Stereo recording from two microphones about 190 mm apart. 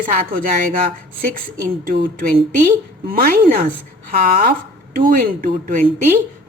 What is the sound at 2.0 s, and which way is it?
Speech, 45° right (ahead or behind).